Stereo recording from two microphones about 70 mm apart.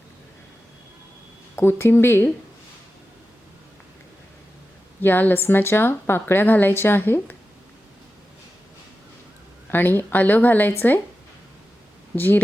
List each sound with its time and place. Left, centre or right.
1.5 s speech: left
5.0 s a woman's voice: left
9.7 s a woman's voice: left
12.1 s speech: left